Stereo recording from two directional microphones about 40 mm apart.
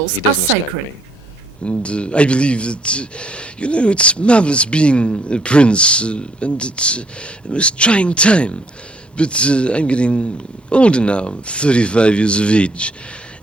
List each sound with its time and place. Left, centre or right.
1.6 s speech: left